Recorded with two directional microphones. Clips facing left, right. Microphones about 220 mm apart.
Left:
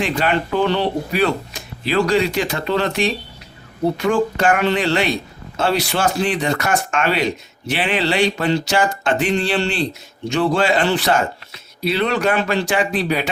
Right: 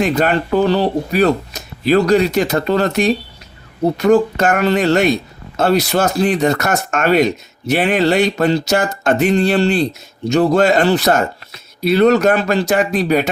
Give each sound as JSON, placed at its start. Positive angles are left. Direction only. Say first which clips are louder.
{"t": 0.0, "sound": "speech", "louder": "right 4 dB", "side_deg": -45}